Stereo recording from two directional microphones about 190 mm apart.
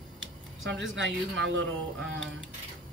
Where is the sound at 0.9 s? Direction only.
80° right.